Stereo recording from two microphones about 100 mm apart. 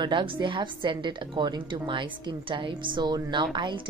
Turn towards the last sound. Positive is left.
turn(degrees=-50)  # may be behind; listen again after turning